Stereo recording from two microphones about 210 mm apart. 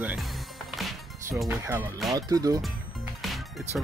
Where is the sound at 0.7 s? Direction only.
Centre (ahead or behind).